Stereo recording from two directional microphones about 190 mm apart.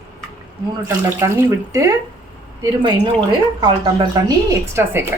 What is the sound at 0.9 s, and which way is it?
Speech, 15° right (ahead or behind).